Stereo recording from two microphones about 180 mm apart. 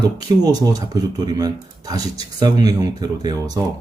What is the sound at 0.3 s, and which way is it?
Speech, 20° right (ahead or behind).